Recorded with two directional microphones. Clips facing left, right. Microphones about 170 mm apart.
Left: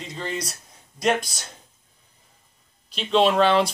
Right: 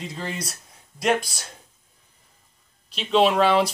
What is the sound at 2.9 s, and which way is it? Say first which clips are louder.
Speech: even; 5° right (ahead or behind).